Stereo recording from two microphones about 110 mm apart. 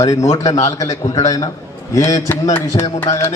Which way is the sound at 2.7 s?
50° left (ahead or behind).